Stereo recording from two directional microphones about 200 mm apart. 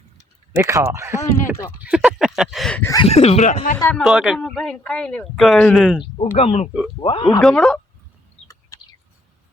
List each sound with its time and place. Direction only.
0.5 s speech: 15° right (ahead or behind)
1.8 s a sound: 5° right (ahead or behind)
3.1 s speech: 30° left (ahead or behind)
3.8 s speech: 10° left (ahead or behind)
4.0 s speech: 5° right (ahead or behind)
6.0 s speech: 30° left (ahead or behind)
7.4 s speech: centre (ahead or behind)
8.7 s bird: 15° left (ahead or behind)